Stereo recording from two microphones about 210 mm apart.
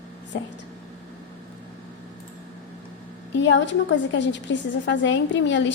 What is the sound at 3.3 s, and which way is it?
A woman's voice, 60° left (ahead or behind).